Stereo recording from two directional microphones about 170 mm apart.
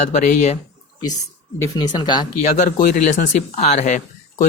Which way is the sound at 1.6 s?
25° left (ahead or behind).